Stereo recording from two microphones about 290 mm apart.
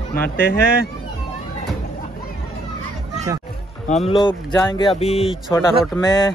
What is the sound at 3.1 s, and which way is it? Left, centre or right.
Music, centre.